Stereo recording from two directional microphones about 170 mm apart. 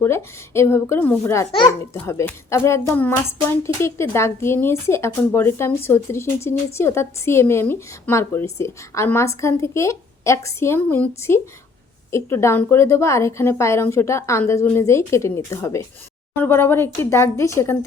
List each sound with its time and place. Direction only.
0.0 s a child's voice: 15° left (ahead or behind)